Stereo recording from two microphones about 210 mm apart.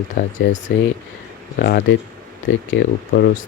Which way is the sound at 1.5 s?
50° left (ahead or behind).